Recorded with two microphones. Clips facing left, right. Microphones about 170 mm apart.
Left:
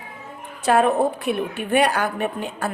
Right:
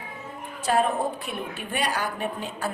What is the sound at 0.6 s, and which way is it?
A woman's voice, 65° left (ahead or behind).